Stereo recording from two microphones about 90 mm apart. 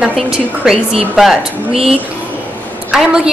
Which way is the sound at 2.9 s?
5° right (ahead or behind).